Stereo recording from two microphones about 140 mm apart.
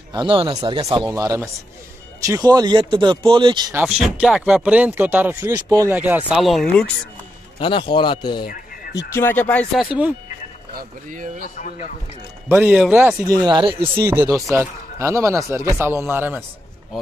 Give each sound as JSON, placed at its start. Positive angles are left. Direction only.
{"t": 0.1, "sound": "a man's voice", "side_deg": -35}
{"t": 3.7, "sound": "speech", "side_deg": -5}
{"t": 6.3, "sound": "speech", "side_deg": 0}
{"t": 7.6, "sound": "speech", "side_deg": 35}
{"t": 8.9, "sound": "speech", "side_deg": 15}
{"t": 9.8, "sound": "speech", "side_deg": -10}
{"t": 10.7, "sound": "speech", "side_deg": -80}
{"t": 11.5, "sound": "speech", "side_deg": 60}
{"t": 12.4, "sound": "speech", "side_deg": -15}
{"t": 13.3, "sound": "speech", "side_deg": -30}
{"t": 13.9, "sound": "a man's voice", "side_deg": -20}